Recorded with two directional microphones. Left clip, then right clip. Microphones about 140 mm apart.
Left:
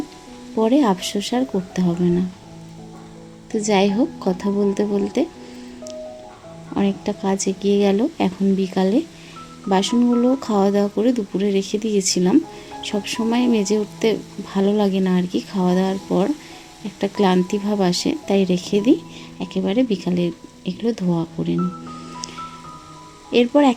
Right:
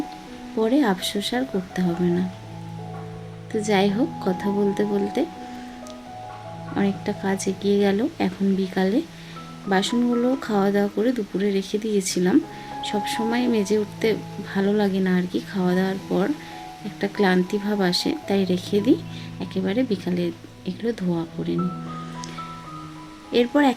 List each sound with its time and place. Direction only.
0.6 s speech: 35° left (ahead or behind)
3.5 s speech: 35° left (ahead or behind)
6.7 s speech: 35° left (ahead or behind)
23.3 s speech: 30° left (ahead or behind)